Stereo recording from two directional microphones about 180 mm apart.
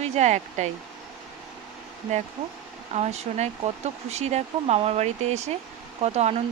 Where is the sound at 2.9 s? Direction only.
40° right (ahead or behind).